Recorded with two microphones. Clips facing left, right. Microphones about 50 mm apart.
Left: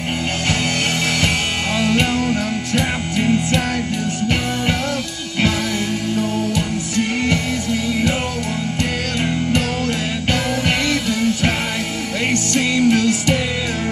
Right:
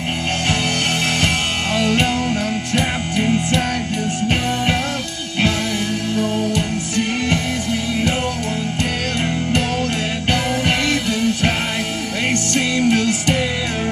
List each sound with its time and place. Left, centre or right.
10.9 s music: right